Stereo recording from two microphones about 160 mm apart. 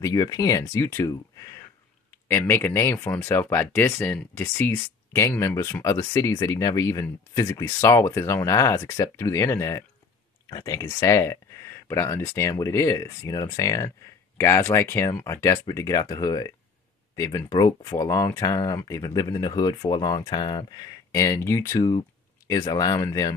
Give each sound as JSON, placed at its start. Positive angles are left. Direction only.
{"t": 0.0, "sound": "speech", "side_deg": 20}